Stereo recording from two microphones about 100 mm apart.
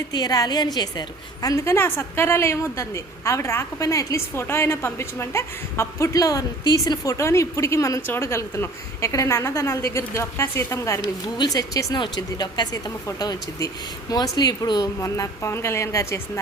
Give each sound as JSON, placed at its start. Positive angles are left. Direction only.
{"t": 0.1, "sound": "a woman's voice", "side_deg": 45}
{"t": 11.9, "sound": "speech", "side_deg": 45}